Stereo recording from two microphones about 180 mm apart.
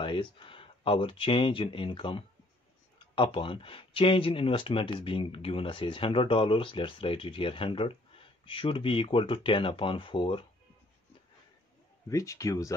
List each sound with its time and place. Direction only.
0.0 s speech: 25° left (ahead or behind)
12.1 s speech: 15° left (ahead or behind)